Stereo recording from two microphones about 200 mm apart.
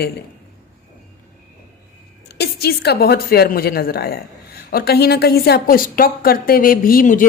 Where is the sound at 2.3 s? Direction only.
55° left (ahead or behind).